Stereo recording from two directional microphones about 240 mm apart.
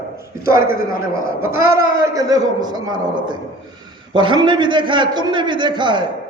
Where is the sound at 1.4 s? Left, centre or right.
Centre.